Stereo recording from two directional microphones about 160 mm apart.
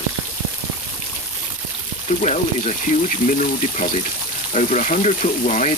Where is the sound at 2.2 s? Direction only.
45° left (ahead or behind).